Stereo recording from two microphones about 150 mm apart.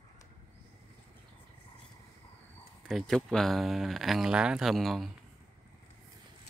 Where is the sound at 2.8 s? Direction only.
Centre (ahead or behind).